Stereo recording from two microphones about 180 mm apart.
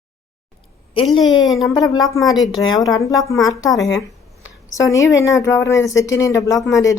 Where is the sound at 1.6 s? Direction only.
20° left (ahead or behind).